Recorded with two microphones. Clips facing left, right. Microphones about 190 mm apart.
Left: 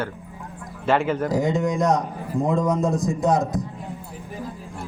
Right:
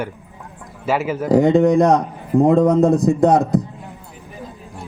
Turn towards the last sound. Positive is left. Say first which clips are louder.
# right 7 dB
turn(degrees=-60)  # may be behind; listen again after turning